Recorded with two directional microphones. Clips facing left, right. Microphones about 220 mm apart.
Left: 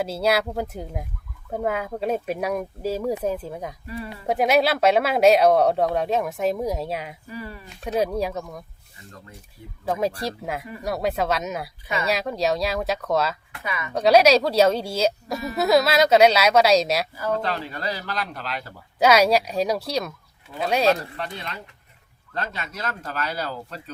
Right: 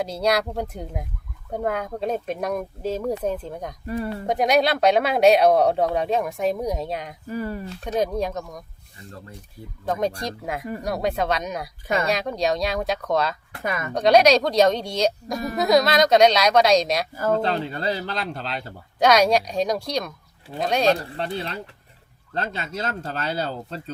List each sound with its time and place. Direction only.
0.0 s speech: 5° left (ahead or behind)
3.8 s speech: 50° right (ahead or behind)
4.3 s speech: 5° left (ahead or behind)
7.3 s speech: 45° right (ahead or behind)
7.9 s speech: 5° left (ahead or behind)
9.8 s speech: 5° left (ahead or behind)
13.6 s speech: 45° right (ahead or behind)
13.9 s speech: 5° left (ahead or behind)
17.3 s speech: 30° right (ahead or behind)
18.9 s speech: 5° left (ahead or behind)
20.9 s speech: 30° right (ahead or behind)